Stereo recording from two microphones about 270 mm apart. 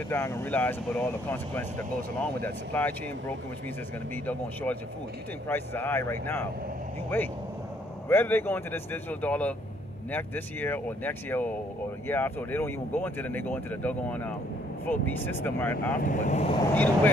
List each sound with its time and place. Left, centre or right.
0.1 s speech: centre
5.5 s speech: centre
16.0 s speech: left
16.7 s speech: centre